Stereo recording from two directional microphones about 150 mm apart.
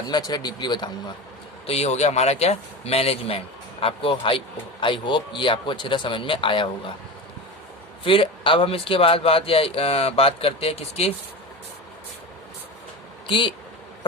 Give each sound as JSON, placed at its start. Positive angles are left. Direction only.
{"t": 0.1, "sound": "speech", "side_deg": 25}
{"t": 1.6, "sound": "speech", "side_deg": 45}
{"t": 8.0, "sound": "speech", "side_deg": 35}
{"t": 13.2, "sound": "speech", "side_deg": 35}